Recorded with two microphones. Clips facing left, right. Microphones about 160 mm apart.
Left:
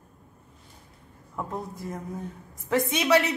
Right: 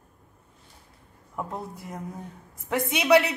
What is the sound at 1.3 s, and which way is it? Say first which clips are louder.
Speech: even; 10° right (ahead or behind).